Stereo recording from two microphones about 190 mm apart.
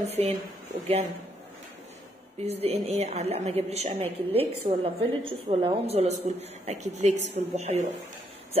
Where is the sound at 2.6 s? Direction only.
35° right (ahead or behind).